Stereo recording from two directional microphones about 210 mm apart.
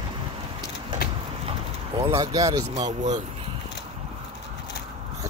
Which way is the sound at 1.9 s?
20° right (ahead or behind).